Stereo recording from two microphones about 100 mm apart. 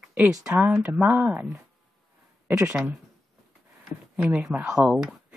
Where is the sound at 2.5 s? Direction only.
20° right (ahead or behind).